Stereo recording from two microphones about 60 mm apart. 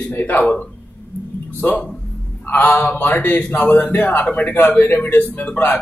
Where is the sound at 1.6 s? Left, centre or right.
Left.